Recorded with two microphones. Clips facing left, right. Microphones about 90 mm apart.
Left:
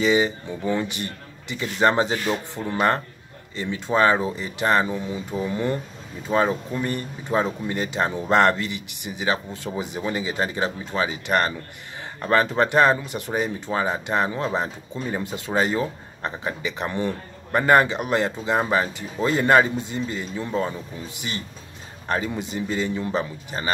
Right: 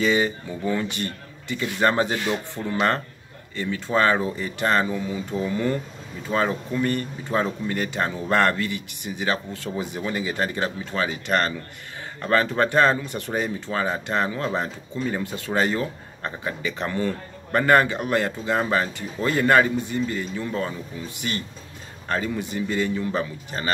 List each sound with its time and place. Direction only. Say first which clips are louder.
0.0 s speech: left 1 dB; 15° left (ahead or behind)